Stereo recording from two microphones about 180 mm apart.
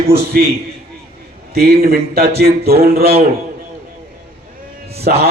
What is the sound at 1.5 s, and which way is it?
Speech, 55° right (ahead or behind).